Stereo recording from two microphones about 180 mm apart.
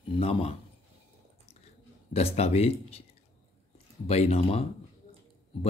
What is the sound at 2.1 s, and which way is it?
Speech, 35° left (ahead or behind).